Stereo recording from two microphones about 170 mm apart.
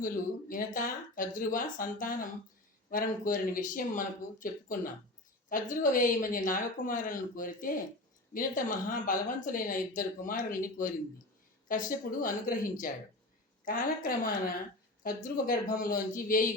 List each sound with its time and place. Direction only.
0.0 s speech: 55° left (ahead or behind)